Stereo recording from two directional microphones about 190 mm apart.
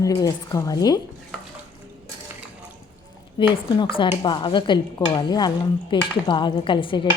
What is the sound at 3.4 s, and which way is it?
Speech, 25° left (ahead or behind).